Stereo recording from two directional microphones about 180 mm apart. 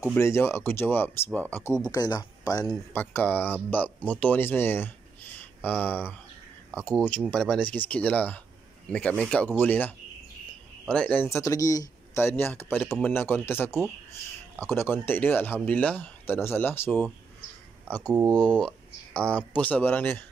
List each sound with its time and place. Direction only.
0.1 s speech: 15° left (ahead or behind)
2.7 s speech: 10° left (ahead or behind)
18.2 s speech: 20° right (ahead or behind)
18.5 s speech: 5° left (ahead or behind)